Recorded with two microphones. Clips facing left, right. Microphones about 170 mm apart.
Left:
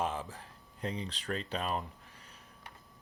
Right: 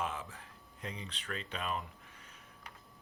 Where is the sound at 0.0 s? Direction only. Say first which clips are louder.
Left 4 dB; 35° left (ahead or behind).